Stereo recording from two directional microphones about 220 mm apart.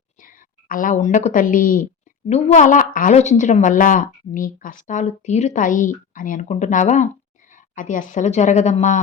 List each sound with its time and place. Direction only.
0.2 s a woman's voice: 40° left (ahead or behind)